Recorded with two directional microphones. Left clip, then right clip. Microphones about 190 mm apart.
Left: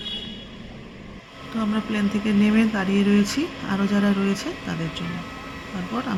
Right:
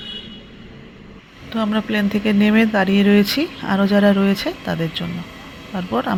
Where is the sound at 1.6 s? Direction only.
20° right (ahead or behind).